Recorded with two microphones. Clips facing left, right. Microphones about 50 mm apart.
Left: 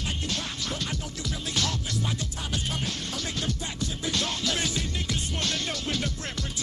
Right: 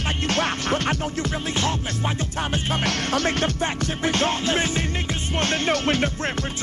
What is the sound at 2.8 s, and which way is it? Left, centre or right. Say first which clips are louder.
Music: right 10 dB; right.